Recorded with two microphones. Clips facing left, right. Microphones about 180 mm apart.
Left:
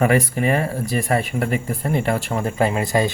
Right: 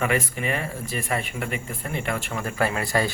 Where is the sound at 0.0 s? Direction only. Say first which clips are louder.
Left 7 dB; 40° left (ahead or behind).